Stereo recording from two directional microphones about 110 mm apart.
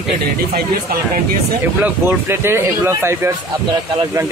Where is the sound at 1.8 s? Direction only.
15° right (ahead or behind).